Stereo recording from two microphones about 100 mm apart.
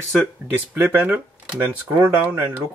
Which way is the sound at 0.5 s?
20° right (ahead or behind).